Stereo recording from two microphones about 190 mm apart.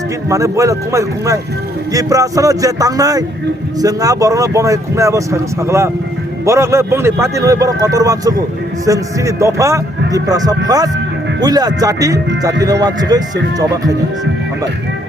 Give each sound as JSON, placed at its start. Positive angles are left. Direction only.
{"t": 0.3, "sound": "speech", "side_deg": -15}